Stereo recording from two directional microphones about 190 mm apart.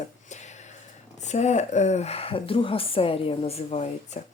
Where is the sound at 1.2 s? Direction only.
35° left (ahead or behind).